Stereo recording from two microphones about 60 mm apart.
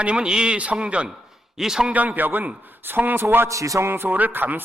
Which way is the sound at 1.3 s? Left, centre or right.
Centre.